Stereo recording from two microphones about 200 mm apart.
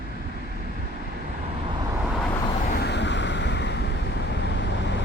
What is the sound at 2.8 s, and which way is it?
Vehicle, 60° left (ahead or behind).